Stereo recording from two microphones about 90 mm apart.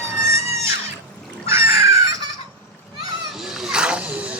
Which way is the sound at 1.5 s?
30° right (ahead or behind).